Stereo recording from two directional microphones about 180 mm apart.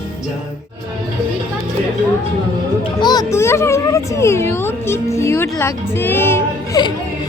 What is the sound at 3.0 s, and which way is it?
Music, 20° left (ahead or behind).